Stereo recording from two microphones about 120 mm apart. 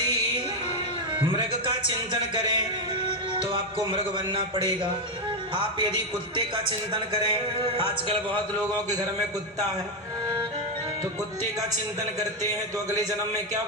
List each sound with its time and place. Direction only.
1.1 s a man's voice: 45° right (ahead or behind)